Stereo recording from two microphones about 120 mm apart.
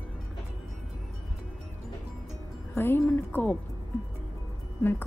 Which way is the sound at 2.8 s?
20° left (ahead or behind).